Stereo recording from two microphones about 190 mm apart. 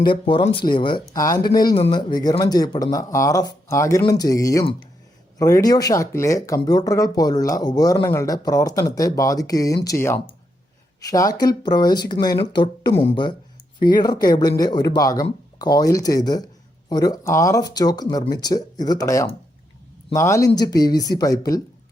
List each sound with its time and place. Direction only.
0.0 s speech: 25° left (ahead or behind)